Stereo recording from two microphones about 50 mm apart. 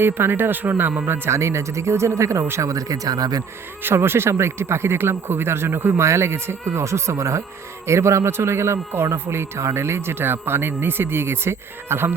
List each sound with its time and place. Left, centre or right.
0.0 s speech: right
1.3 s speech: right
3.8 s speech: right
6.0 s speech: right
7.9 s speech: right